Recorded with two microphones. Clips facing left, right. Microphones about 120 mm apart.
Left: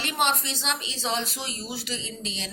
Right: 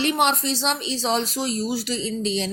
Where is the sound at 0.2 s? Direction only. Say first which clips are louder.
Right 5 dB; 35° right (ahead or behind).